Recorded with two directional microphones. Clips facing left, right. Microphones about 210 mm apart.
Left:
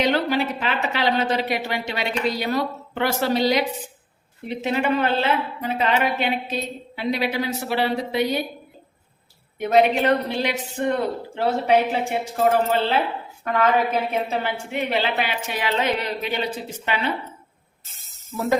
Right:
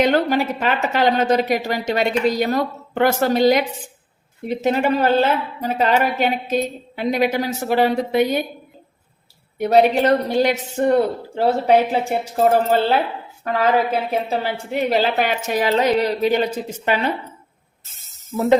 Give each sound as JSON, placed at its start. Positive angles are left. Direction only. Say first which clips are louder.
{"t": 0.0, "sound": "a woman's voice", "louder": "right 4 dB", "side_deg": -45}
{"t": 9.6, "sound": "a woman's voice", "louder": "right 3 dB", "side_deg": -40}